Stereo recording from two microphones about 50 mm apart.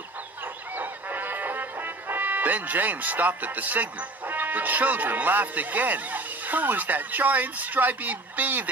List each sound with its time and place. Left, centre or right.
0.8 s music: right
4.3 s speech: right